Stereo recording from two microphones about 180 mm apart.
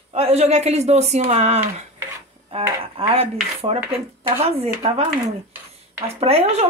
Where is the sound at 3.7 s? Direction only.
15° right (ahead or behind).